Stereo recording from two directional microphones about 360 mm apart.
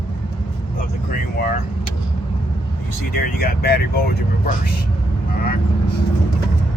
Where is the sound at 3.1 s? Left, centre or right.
Left.